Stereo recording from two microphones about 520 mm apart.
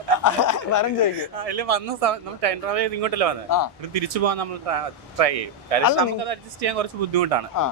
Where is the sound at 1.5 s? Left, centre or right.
Right.